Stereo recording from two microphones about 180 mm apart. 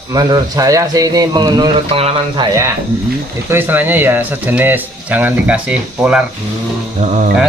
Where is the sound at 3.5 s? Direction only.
10° right (ahead or behind).